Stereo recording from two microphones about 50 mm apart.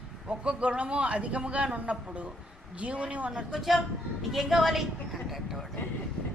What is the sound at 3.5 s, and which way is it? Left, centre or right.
A woman's voice, centre.